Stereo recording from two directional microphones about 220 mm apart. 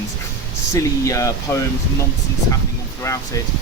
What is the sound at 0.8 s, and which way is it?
Speech, 15° left (ahead or behind).